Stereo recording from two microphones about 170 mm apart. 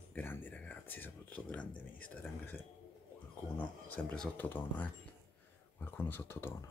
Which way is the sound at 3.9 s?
10° left (ahead or behind).